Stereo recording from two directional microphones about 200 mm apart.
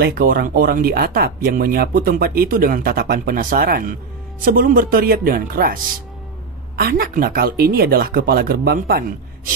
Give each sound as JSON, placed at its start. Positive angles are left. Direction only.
{"t": 0.0, "sound": "speech", "side_deg": -45}
{"t": 6.8, "sound": "speech", "side_deg": -50}